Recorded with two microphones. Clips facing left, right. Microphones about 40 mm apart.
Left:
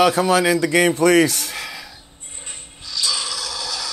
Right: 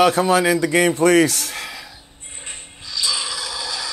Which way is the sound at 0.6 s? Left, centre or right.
Left.